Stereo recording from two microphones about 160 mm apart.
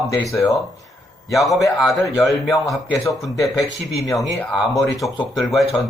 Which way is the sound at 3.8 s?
Centre (ahead or behind).